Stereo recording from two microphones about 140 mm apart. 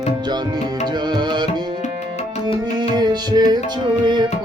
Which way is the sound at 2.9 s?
30° right (ahead or behind).